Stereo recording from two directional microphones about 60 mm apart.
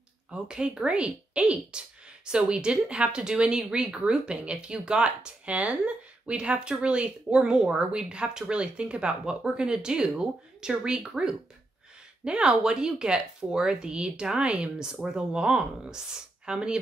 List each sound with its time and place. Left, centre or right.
0.3 s speech: centre